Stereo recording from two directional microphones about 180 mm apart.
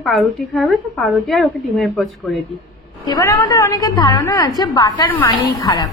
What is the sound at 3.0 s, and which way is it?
A woman's voice, 20° left (ahead or behind).